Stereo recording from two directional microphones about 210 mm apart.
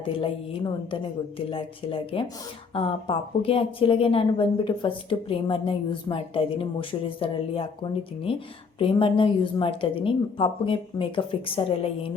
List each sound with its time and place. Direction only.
0.0 s a woman's voice: 25° left (ahead or behind)